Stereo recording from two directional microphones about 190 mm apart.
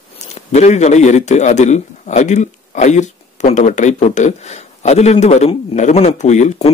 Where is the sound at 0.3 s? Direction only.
35° left (ahead or behind).